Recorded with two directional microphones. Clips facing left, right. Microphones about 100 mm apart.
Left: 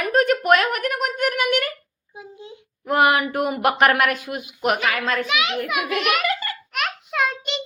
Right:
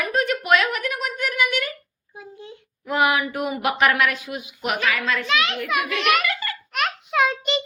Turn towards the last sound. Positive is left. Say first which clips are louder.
# right 3 dB
turn(degrees=0)  # may be behind; listen again after turning